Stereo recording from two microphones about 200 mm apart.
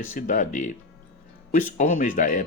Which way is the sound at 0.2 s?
40° left (ahead or behind).